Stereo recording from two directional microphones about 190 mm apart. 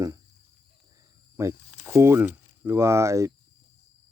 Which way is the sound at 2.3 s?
15° right (ahead or behind).